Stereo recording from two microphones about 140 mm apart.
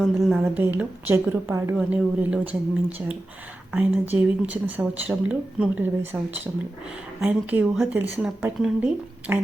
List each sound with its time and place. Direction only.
0.0 s a woman's voice: centre (ahead or behind)
0.4 s speech: 15° right (ahead or behind)
1.7 s speech: 10° right (ahead or behind)
3.7 s speech: 10° right (ahead or behind)